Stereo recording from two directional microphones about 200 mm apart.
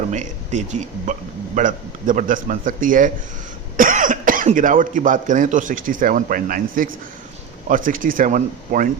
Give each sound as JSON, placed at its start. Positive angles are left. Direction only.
{"t": 0.1, "sound": "speech", "side_deg": -35}